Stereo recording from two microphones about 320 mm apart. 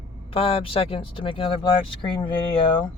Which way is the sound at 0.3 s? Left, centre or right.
Centre.